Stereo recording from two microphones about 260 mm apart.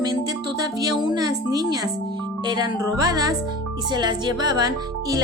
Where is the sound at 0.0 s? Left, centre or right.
Centre.